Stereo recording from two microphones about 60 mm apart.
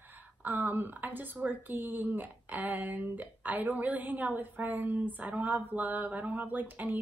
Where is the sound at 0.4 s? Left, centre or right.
Right.